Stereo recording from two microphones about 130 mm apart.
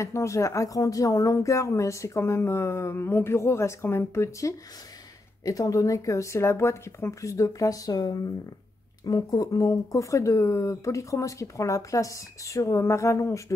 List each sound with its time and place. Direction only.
0.0 s speech: 20° left (ahead or behind)